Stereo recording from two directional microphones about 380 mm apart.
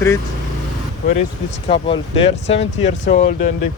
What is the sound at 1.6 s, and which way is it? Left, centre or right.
Speech, centre.